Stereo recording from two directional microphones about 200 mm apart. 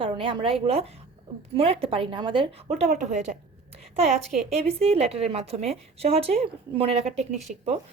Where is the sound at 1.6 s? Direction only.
30° right (ahead or behind).